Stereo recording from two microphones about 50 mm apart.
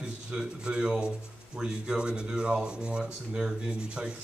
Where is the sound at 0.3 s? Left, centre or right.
Centre.